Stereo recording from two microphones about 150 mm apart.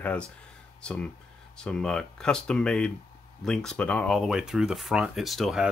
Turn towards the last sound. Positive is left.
turn(degrees=0)  # may be behind; listen again after turning